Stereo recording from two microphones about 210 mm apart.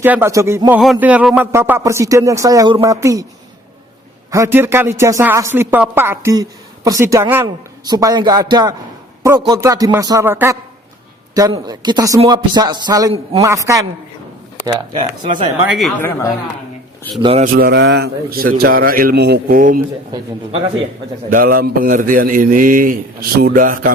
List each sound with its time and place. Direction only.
0.0 s speech: 10° right (ahead or behind)
4.3 s a man's voice: 15° right (ahead or behind)
14.9 s a man's voice: 35° right (ahead or behind)
15.7 s speech: 5° left (ahead or behind)
17.2 s a man's voice: 30° right (ahead or behind)
17.5 s a man's voice: 50° right (ahead or behind)
21.2 s a man's voice: 45° right (ahead or behind)